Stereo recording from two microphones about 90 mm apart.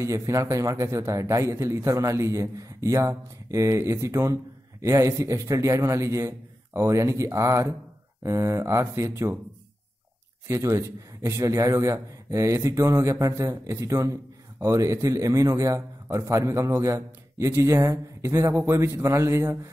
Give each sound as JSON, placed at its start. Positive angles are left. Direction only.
{"t": 0.0, "sound": "a man's voice", "side_deg": -35}
{"t": 10.5, "sound": "a man's voice", "side_deg": -35}